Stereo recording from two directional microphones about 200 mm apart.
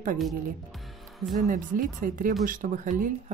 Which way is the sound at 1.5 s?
40° right (ahead or behind).